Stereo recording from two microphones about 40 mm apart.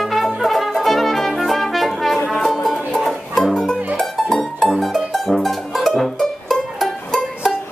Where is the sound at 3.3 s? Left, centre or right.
Centre.